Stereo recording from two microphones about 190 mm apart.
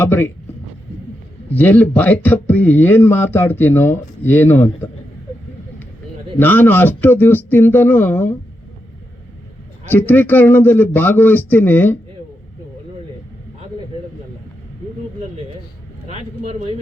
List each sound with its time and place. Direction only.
0.0 s speech: 10° left (ahead or behind)
1.5 s speech: 10° left (ahead or behind)
6.4 s speech: 10° left (ahead or behind)
9.9 s speech: 10° left (ahead or behind)
16.0 s vehicle: 35° right (ahead or behind)